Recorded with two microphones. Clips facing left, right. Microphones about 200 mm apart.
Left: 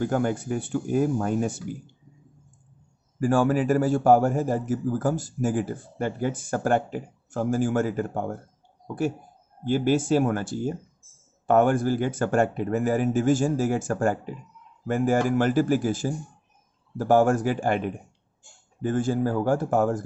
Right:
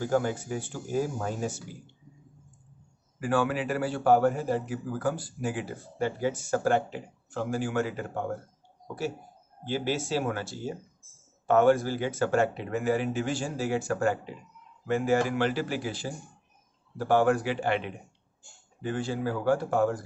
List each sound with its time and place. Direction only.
0.1 s speech: 55° left (ahead or behind)
3.2 s a man's voice: 45° left (ahead or behind)
9.7 s a man's voice: 50° left (ahead or behind)